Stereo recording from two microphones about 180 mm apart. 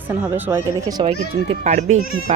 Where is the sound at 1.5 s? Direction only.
35° right (ahead or behind).